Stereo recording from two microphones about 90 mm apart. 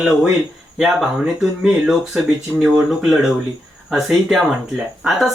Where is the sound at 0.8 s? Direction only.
5° right (ahead or behind).